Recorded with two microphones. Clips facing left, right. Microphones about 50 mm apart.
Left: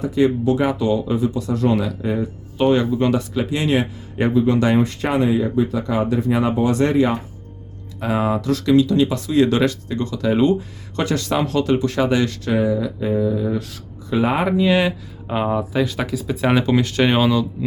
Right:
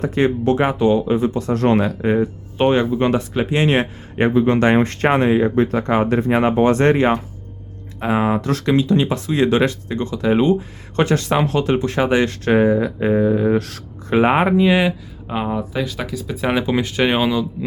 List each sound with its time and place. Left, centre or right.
0.0 s speech: right
7.9 s speech: right
14.2 s speech: right; by 17.7 s centre